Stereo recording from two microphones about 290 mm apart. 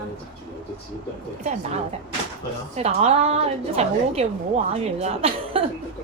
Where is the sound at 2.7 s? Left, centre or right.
Right.